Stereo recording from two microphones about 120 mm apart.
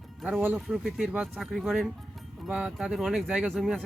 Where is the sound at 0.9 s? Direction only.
Centre (ahead or behind).